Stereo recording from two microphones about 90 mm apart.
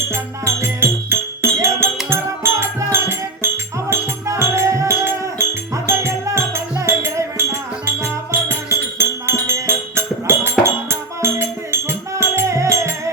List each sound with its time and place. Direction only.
0.1 s music: 30° right (ahead or behind)